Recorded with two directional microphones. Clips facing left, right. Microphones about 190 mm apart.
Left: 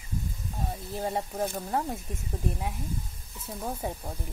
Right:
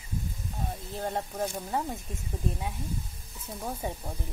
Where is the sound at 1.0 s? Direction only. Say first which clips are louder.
Left 1 dB; 5° left (ahead or behind).